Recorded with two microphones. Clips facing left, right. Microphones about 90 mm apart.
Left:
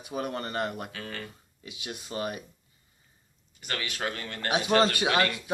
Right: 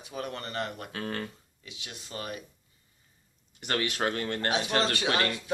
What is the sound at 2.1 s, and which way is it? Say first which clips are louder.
Speech: left 5 dB; 25° left (ahead or behind).